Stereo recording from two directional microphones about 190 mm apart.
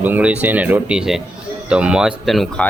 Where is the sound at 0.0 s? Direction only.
10° right (ahead or behind).